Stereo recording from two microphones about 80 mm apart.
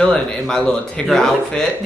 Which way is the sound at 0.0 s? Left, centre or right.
Centre.